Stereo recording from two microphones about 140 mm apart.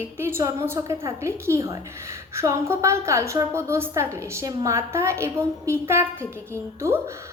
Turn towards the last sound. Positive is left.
turn(degrees=-20)  # may be behind; listen again after turning